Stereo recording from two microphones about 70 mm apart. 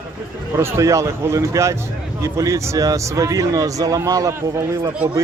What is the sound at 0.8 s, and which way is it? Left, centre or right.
A man's voice, right.